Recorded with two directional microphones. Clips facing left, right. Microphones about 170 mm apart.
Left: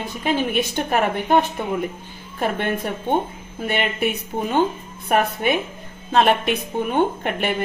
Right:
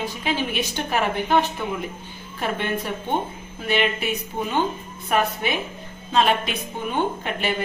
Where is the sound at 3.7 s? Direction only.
55° left (ahead or behind).